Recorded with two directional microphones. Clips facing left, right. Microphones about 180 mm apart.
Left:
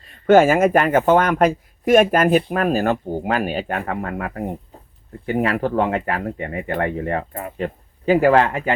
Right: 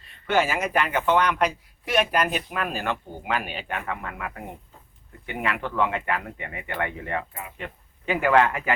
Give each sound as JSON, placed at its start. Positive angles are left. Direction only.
{"t": 0.3, "sound": "speech", "side_deg": 50}